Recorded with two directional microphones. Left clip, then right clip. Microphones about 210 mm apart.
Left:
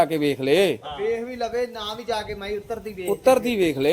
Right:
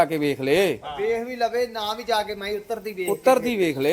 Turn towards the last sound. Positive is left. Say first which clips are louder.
# left 1 dB
turn(degrees=5)  # may be behind; listen again after turning